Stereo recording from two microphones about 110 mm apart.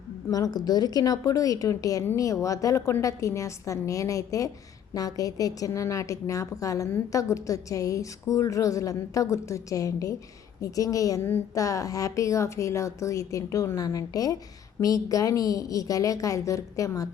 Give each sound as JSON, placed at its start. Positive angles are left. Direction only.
{"t": 0.3, "sound": "a woman's voice", "side_deg": 35}
{"t": 11.2, "sound": "a woman's voice", "side_deg": 20}
{"t": 11.5, "sound": "a woman's voice", "side_deg": 30}